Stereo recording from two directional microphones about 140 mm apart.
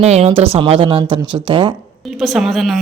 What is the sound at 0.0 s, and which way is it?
Speech, 50° right (ahead or behind).